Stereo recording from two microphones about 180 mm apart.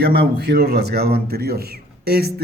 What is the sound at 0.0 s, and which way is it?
Speech, 65° right (ahead or behind).